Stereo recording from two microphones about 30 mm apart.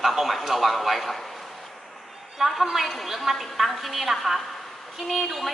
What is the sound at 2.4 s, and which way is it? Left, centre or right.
A woman's voice, centre.